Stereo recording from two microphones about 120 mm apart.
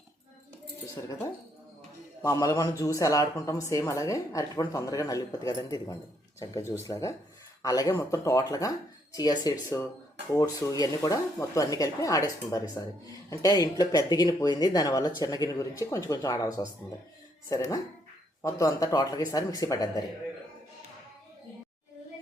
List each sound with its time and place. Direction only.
2.2 s speech: 30° left (ahead or behind)
18.4 s speech: 30° left (ahead or behind)